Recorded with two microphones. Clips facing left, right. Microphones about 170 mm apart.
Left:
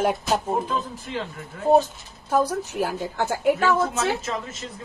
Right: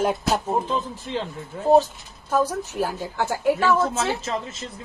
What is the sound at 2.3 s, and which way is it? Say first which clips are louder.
Speech: even; 15° left (ahead or behind).